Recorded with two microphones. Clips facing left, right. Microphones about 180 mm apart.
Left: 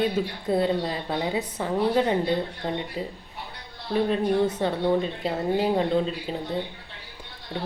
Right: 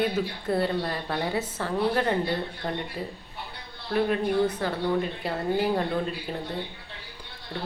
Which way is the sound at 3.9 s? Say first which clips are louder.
Left 2 dB; 25° left (ahead or behind).